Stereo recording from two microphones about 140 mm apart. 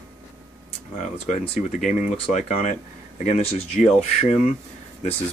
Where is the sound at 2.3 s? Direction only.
65° left (ahead or behind).